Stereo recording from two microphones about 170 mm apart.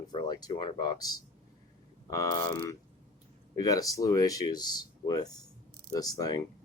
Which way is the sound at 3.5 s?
20° left (ahead or behind).